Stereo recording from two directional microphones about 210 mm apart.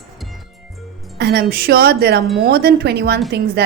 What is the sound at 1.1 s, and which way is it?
A woman's voice, 50° right (ahead or behind).